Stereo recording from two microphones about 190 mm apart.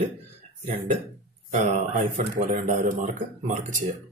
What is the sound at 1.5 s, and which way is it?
Speech, 40° right (ahead or behind).